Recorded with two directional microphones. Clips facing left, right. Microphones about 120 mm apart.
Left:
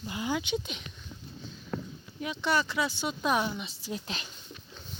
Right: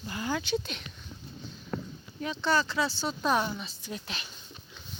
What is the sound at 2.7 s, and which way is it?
Speech, 30° right (ahead or behind).